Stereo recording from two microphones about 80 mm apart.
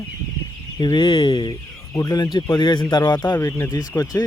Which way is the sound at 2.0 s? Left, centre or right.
Left.